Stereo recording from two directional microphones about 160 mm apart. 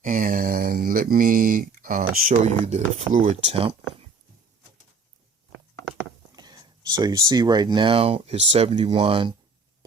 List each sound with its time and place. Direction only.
0.0 s speech: 60° right (ahead or behind)
2.5 s speech: 45° right (ahead or behind)
6.3 s speech: 25° right (ahead or behind)